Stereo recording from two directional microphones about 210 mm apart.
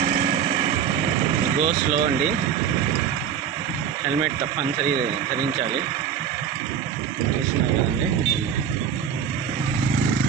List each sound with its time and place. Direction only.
0.0 s vehicle: 30° right (ahead or behind)
1.6 s speech: 30° right (ahead or behind)